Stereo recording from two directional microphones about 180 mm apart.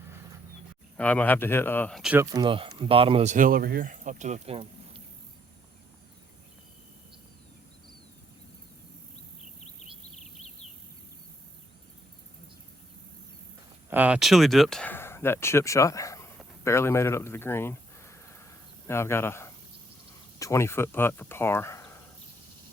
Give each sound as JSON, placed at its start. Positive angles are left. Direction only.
{"t": 0.9, "sound": "speech", "side_deg": 10}
{"t": 2.0, "sound": "speech", "side_deg": -5}
{"t": 2.2, "sound": "speech", "side_deg": -25}
{"t": 3.3, "sound": "speech", "side_deg": -50}
{"t": 10.2, "sound": "a sound", "side_deg": 35}
{"t": 13.9, "sound": "speech", "side_deg": -10}